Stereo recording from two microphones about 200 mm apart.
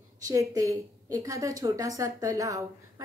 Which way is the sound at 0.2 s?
15° right (ahead or behind).